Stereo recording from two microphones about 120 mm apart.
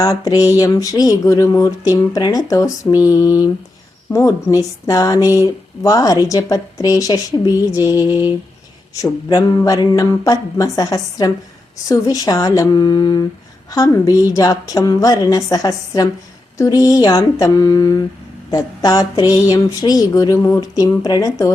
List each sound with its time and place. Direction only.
0.0 s speech: 30° left (ahead or behind)